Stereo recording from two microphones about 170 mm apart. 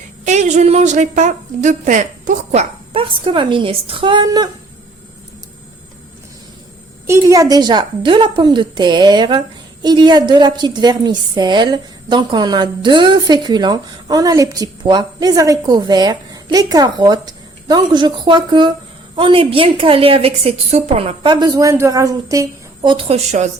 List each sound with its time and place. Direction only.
0.3 s a woman's voice: 45° right (ahead or behind); by 4.4 s 25° right (ahead or behind)
7.1 s a woman's voice: 20° right (ahead or behind); by 23.5 s 40° right (ahead or behind)